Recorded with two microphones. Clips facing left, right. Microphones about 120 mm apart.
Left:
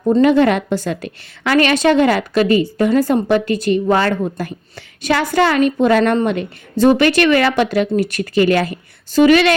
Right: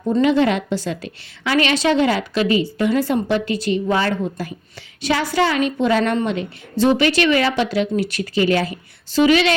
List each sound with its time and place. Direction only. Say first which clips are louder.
0.1 s a woman's voice: left 4 dB; 50° left (ahead or behind)